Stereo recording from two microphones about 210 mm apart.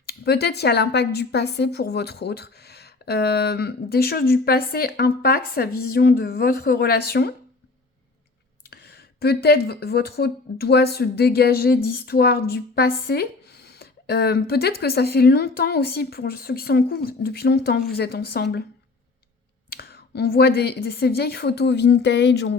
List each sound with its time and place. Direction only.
0.0 s speech: 50° left (ahead or behind)
8.7 s speech: 50° left (ahead or behind)
19.7 s speech: 45° left (ahead or behind)